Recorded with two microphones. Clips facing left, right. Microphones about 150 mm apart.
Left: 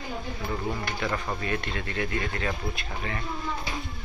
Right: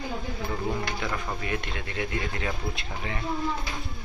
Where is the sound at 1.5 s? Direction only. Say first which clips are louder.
Left 1 dB; 15° right (ahead or behind).